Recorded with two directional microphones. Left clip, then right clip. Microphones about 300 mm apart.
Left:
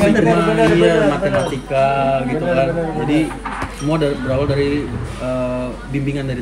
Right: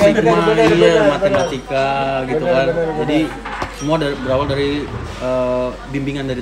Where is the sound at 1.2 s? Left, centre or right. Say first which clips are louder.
Right 2 dB; centre.